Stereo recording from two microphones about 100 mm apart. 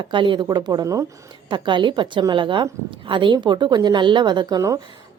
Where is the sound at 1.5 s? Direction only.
50° right (ahead or behind).